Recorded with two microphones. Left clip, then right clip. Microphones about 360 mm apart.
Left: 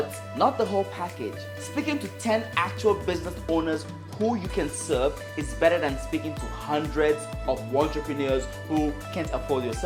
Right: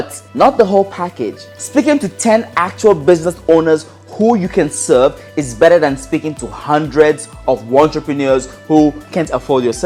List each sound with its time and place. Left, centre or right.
0.3 s a woman's voice: right